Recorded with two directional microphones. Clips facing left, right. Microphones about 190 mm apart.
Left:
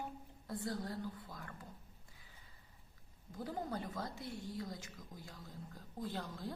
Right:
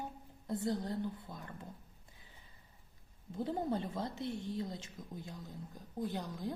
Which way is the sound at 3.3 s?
25° right (ahead or behind).